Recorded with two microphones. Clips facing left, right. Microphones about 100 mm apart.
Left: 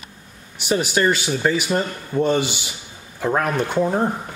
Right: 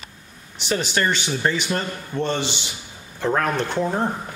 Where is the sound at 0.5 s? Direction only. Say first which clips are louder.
Left 3 dB; 10° left (ahead or behind).